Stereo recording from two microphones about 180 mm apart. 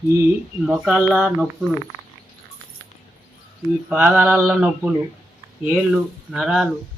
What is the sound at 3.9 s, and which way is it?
Mantra, 5° right (ahead or behind).